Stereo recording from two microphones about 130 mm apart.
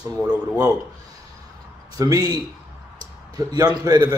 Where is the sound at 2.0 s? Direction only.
30° right (ahead or behind).